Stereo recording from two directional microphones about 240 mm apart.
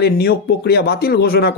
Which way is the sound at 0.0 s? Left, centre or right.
Left.